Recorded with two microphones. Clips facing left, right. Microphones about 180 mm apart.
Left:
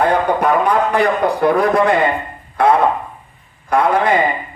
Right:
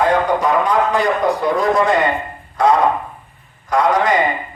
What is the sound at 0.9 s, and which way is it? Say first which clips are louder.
A man's voice: left 1 dB; 60° left (ahead or behind).